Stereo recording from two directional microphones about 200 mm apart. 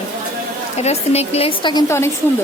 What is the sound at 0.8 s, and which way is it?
A woman's voice, 30° left (ahead or behind).